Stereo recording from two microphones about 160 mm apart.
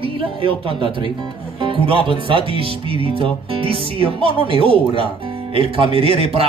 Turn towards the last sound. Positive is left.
turn(degrees=-35)  # may be behind; listen again after turning